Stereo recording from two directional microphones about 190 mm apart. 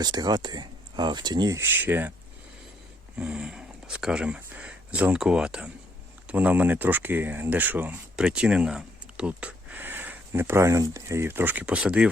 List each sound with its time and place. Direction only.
0.0 s speech: 20° right (ahead or behind)
3.2 s speech: 5° right (ahead or behind)